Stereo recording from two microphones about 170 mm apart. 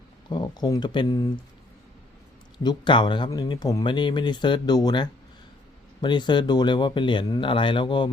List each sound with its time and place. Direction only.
0.3 s speech: 25° left (ahead or behind)
2.6 s speech: 25° left (ahead or behind)